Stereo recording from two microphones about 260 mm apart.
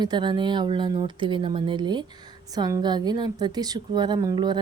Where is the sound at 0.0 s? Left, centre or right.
Centre.